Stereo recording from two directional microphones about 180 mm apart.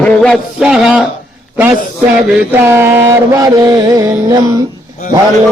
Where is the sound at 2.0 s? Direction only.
10° right (ahead or behind).